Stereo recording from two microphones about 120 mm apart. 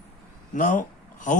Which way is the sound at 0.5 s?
90° left.